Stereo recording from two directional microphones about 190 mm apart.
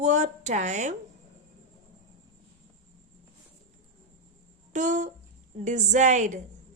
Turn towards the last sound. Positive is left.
turn(degrees=-40)  # may be behind; listen again after turning